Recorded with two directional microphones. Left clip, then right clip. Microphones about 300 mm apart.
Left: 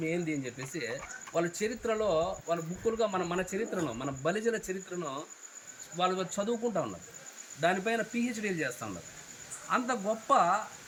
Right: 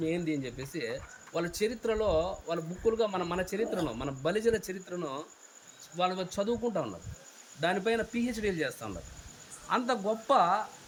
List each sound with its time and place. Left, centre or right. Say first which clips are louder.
0.1 s speech: right 1 dB; centre